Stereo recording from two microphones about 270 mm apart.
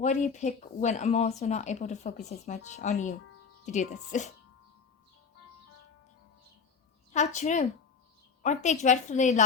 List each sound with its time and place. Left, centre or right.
0.0 s speech: left
7.1 s speech: left